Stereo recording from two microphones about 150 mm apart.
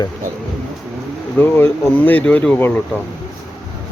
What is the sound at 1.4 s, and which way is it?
Speech, 15° left (ahead or behind).